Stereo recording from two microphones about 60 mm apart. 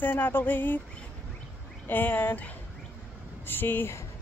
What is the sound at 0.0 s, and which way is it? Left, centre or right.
Speech, left.